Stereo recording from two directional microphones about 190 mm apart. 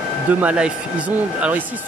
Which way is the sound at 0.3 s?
10° right (ahead or behind).